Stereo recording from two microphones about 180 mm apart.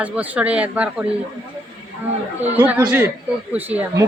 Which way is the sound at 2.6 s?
10° right (ahead or behind).